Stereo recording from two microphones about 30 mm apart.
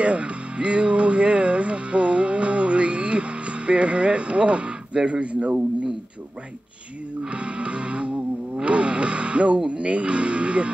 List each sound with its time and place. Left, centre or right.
0.0 s music: right
7.2 s music: right